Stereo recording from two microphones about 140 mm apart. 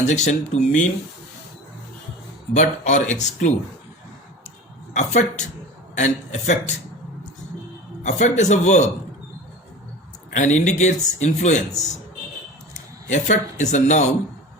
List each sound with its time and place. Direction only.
0.0 s speech: 55° left (ahead or behind)
2.6 s speech: 60° left (ahead or behind)
4.9 s speech: 60° left (ahead or behind)
8.0 s speech: 55° left (ahead or behind)
10.3 s speech: 55° left (ahead or behind)
13.1 s speech: 60° left (ahead or behind)